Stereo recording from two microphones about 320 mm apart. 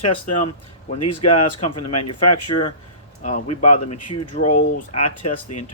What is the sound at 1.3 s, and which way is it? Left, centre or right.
Speech, centre.